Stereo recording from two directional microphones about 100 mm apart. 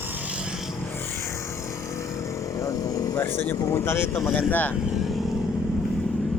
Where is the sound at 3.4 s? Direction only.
25° left (ahead or behind).